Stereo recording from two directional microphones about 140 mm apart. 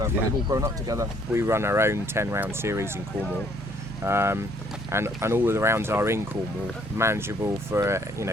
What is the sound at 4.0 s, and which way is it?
Speech, 20° right (ahead or behind).